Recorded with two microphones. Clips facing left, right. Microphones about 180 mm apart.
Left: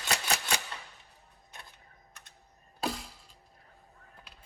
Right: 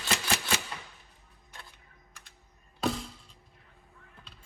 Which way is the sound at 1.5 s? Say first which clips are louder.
Right 1 dB; 20° left (ahead or behind).